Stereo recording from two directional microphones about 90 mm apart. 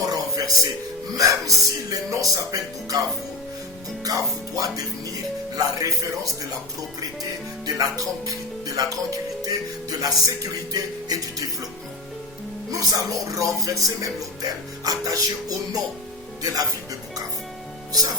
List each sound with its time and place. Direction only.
0.0 s music: 45° right (ahead or behind)
1.1 s speech: 40° right (ahead or behind)
4.0 s speech: 40° right (ahead or behind)
7.2 s speech: 45° right (ahead or behind)
12.7 s speech: 40° right (ahead or behind)